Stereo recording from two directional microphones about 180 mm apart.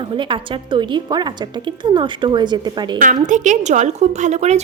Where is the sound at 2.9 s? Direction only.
45° right (ahead or behind).